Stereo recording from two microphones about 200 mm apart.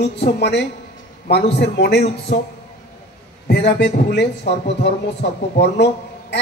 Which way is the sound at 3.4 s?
55° left (ahead or behind).